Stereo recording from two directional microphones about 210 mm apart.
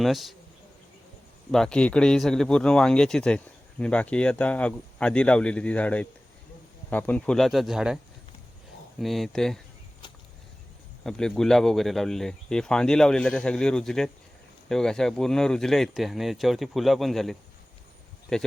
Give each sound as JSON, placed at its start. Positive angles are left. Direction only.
{"t": 0.0, "sound": "a man's voice", "side_deg": 0}
{"t": 1.5, "sound": "a man's voice", "side_deg": 5}
{"t": 9.0, "sound": "a man's voice", "side_deg": 0}
{"t": 11.0, "sound": "a man's voice", "side_deg": 5}